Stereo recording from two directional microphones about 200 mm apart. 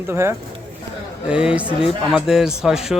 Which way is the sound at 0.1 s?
15° right (ahead or behind).